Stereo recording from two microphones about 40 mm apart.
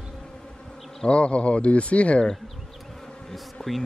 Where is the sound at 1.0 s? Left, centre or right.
Left.